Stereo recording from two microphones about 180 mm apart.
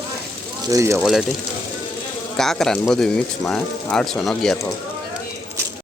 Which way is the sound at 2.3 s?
Centre (ahead or behind).